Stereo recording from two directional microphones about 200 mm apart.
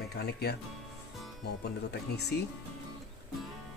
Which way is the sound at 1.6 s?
55° left (ahead or behind).